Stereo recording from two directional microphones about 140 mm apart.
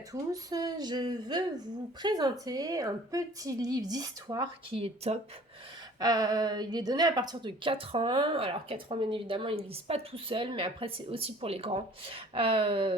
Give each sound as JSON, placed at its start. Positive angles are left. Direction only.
{"t": 0.1, "sound": "speech", "side_deg": -25}
{"t": 4.7, "sound": "speech", "side_deg": -45}
{"t": 6.0, "sound": "speech", "side_deg": -25}